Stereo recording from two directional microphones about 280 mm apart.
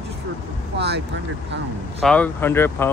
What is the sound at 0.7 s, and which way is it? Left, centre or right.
Speech, right.